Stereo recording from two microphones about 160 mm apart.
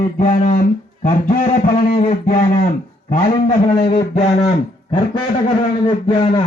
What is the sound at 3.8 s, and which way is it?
Speech, 40° left (ahead or behind).